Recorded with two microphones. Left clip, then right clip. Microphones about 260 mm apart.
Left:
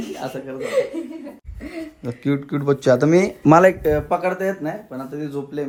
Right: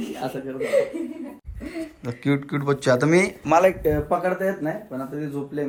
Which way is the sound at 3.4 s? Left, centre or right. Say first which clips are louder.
Left 6 dB; left.